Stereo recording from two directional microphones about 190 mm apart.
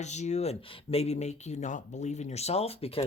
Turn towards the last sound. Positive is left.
turn(degrees=30)  # may be behind; listen again after turning